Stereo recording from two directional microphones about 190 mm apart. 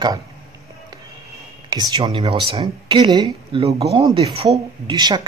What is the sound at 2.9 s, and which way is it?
Speech, 20° right (ahead or behind).